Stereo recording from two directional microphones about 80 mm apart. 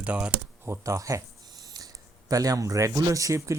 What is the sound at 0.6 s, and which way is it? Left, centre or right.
Speech, right.